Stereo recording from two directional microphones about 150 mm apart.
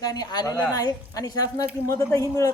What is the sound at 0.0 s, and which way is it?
A man's voice, 25° left (ahead or behind).